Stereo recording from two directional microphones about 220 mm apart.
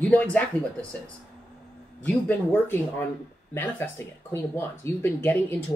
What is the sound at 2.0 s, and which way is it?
Speech, 10° left (ahead or behind).